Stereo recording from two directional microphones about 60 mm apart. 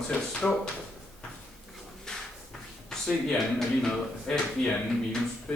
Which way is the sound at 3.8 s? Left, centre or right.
Centre.